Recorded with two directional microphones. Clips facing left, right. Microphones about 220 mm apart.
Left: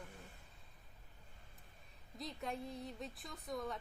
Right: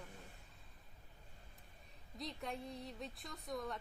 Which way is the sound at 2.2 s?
Centre (ahead or behind).